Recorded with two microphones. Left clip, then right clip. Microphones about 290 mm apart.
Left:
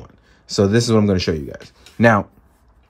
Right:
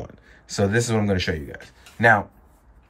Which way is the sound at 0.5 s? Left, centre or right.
Centre.